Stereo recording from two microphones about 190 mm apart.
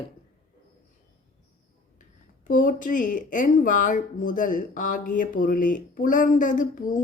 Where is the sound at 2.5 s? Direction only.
45° left (ahead or behind).